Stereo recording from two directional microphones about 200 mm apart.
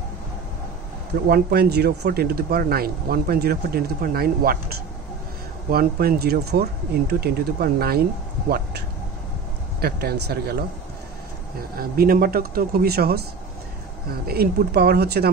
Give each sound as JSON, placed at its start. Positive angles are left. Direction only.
{"t": 1.3, "sound": "speech", "side_deg": -50}
{"t": 11.7, "sound": "speech", "side_deg": -50}
{"t": 14.2, "sound": "speech", "side_deg": -50}